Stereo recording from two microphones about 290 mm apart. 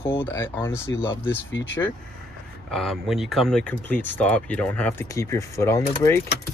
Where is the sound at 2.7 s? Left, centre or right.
Centre.